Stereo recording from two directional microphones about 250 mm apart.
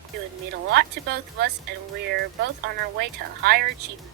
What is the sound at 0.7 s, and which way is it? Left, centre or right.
Speech, right.